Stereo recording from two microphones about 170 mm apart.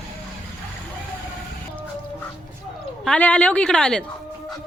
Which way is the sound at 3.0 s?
10° left (ahead or behind).